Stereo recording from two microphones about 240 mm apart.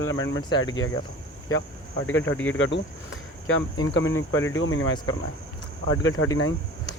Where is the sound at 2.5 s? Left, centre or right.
Left.